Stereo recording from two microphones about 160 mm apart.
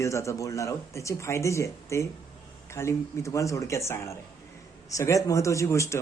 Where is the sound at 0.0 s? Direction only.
20° left (ahead or behind).